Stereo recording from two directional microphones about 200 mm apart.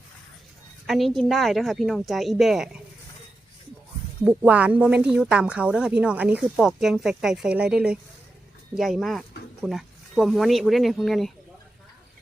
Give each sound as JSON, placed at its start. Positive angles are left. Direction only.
{"t": 0.9, "sound": "speech", "side_deg": 0}
{"t": 4.2, "sound": "speech", "side_deg": -5}